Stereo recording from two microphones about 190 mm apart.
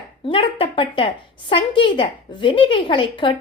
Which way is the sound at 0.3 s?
30° left (ahead or behind).